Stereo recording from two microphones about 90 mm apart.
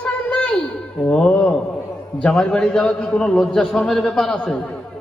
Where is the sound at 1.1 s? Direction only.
15° left (ahead or behind).